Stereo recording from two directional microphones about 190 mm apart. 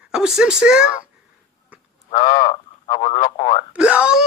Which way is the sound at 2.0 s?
20° left (ahead or behind).